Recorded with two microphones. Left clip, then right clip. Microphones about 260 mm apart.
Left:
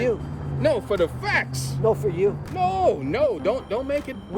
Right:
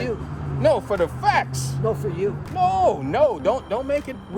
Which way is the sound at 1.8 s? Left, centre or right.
Centre.